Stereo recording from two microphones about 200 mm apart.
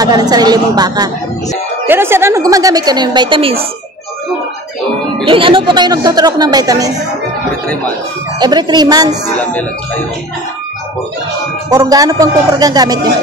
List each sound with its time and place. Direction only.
0.0 s speech: 20° right (ahead or behind)
5.2 s speech: 25° right (ahead or behind)
8.4 s speech: 20° right (ahead or behind)
9.4 s speech: 5° left (ahead or behind)
11.7 s speech: 20° right (ahead or behind)